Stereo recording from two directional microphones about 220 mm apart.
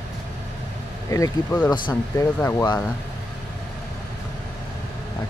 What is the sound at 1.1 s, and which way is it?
Speech, 10° left (ahead or behind).